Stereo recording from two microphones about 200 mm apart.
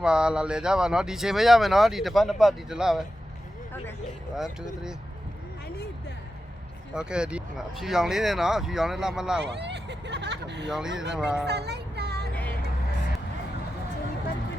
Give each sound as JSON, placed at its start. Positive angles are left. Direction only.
{"t": 0.0, "sound": "speech", "side_deg": -5}
{"t": 4.4, "sound": "speech", "side_deg": 0}
{"t": 6.9, "sound": "speech", "side_deg": -5}
{"t": 9.4, "sound": "speech", "side_deg": -60}
{"t": 10.7, "sound": "speech", "side_deg": 0}
{"t": 11.4, "sound": "music", "side_deg": -55}
{"t": 12.3, "sound": "vehicle", "side_deg": 5}